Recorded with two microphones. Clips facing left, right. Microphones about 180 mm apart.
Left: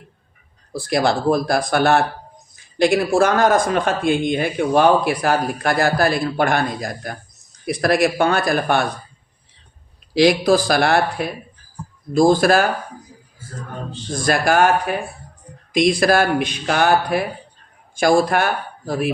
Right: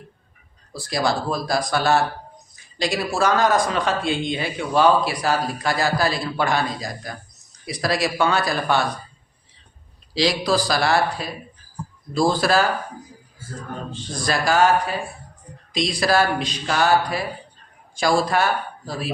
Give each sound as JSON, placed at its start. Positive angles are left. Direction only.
{"t": 0.7, "sound": "a man's voice", "side_deg": 55}
{"t": 10.2, "sound": "a man's voice", "side_deg": 55}
{"t": 14.1, "sound": "a man's voice", "side_deg": 50}